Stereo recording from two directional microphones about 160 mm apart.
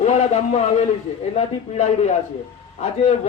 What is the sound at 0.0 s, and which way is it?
A man's voice, 45° left (ahead or behind).